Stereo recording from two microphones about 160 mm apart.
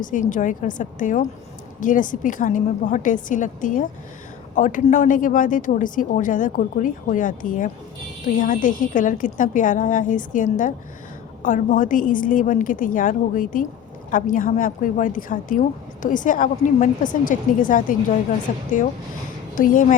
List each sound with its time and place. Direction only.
0.0 s a woman's voice: 55° left (ahead or behind)